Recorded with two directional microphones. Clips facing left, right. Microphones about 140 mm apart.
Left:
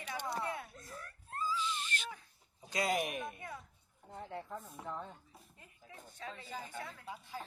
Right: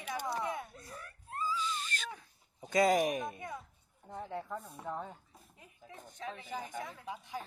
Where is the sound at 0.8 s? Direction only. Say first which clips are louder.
Right 1 dB; 5° right (ahead or behind).